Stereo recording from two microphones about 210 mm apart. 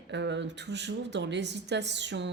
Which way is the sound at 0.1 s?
55° right (ahead or behind).